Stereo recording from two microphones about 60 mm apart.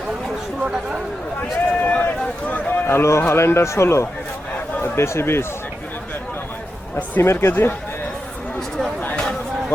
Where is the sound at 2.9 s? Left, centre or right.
Left.